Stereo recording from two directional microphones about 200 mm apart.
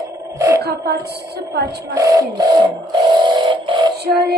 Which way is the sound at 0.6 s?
55° right (ahead or behind).